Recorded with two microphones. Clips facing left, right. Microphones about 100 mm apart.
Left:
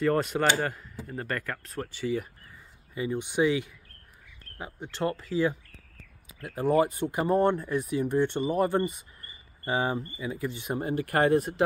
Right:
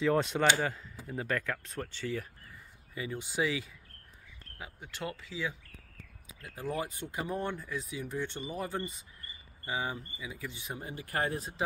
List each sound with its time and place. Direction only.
0.0 s speech: centre (ahead or behind)
2.9 s speech: 20° left (ahead or behind)
4.6 s speech: 30° left (ahead or behind); by 5.6 s 50° left (ahead or behind)
6.4 s speech: 65° left (ahead or behind)